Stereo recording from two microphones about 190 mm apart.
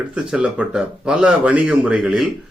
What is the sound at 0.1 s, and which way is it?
A man's voice, 5° right (ahead or behind).